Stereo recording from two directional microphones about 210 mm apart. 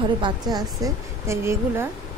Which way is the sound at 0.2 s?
20° right (ahead or behind).